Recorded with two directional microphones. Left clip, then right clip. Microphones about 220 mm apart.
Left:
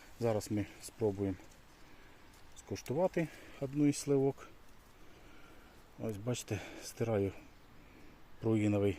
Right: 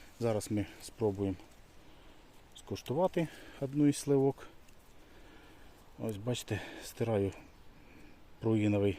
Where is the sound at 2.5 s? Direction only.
10° right (ahead or behind).